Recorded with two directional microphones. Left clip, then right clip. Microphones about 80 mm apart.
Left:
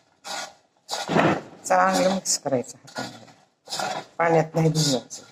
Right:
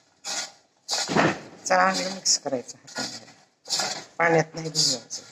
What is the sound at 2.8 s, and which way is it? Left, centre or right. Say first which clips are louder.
Dishes: right 1 dB; left.